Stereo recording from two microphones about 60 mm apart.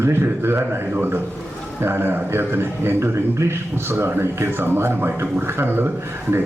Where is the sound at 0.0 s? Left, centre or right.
Right.